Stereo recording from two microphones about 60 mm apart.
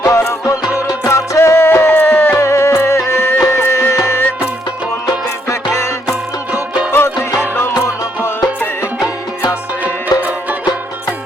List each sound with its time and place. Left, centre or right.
0.0 s music: left
2.4 s music: left
4.2 s music: left
5.5 s music: left
6.9 s music: left
8.2 s music: left
10.1 s music: left